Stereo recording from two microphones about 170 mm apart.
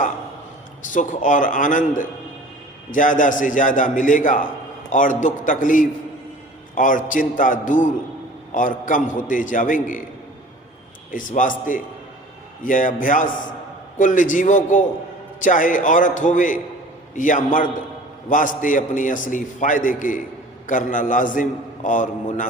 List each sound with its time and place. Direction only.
0.9 s a man's voice: 50° left (ahead or behind)
11.1 s a man's voice: 50° left (ahead or behind)